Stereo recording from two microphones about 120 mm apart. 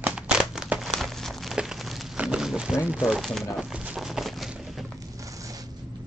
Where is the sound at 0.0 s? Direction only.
10° right (ahead or behind).